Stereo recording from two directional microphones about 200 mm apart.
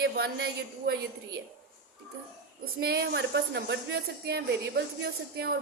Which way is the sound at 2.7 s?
55° right (ahead or behind).